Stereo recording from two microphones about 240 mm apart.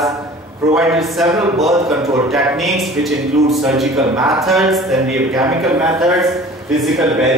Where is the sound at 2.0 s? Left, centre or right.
Centre.